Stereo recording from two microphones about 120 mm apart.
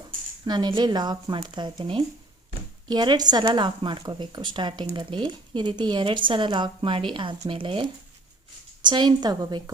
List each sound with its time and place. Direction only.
0.4 s a woman's voice: 35° right (ahead or behind)
8.8 s a woman's voice: 40° right (ahead or behind)